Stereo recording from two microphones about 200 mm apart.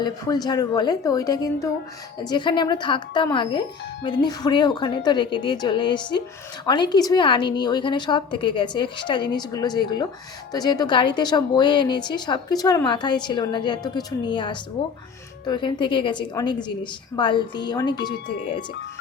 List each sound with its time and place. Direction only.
0.0 s a woman's voice: 20° left (ahead or behind)